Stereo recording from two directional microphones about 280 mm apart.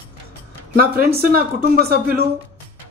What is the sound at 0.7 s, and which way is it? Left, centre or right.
Speech, right.